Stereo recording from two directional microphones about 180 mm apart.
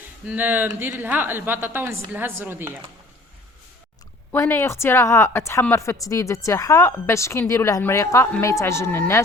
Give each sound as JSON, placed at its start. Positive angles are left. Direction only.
{"t": 0.3, "sound": "a woman's voice", "side_deg": -10}
{"t": 4.3, "sound": "a woman's voice", "side_deg": 10}